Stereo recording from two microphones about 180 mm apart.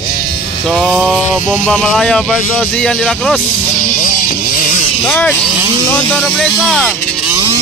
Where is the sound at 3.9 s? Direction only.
45° left (ahead or behind).